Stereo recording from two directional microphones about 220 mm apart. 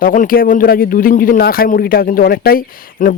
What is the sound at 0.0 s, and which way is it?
Speech, 40° left (ahead or behind).